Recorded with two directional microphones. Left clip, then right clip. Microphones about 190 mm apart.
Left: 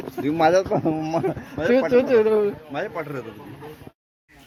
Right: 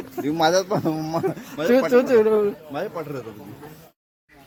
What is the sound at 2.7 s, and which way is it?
Speech, 15° left (ahead or behind).